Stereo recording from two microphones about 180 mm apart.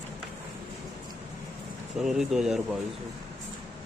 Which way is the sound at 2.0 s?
Centre (ahead or behind).